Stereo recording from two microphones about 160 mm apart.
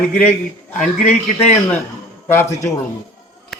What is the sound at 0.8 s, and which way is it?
Speech, 45° left (ahead or behind).